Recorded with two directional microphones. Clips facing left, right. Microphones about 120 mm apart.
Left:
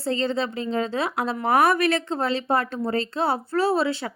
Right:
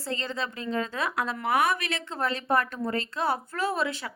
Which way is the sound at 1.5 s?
50° left (ahead or behind).